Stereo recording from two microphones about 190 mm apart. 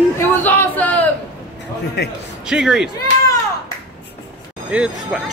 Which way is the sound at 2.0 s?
60° left (ahead or behind).